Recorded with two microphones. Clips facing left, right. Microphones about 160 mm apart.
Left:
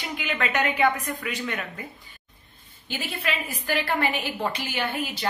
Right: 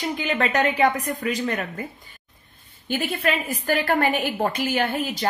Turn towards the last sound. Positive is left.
turn(degrees=-40)  # may be behind; listen again after turning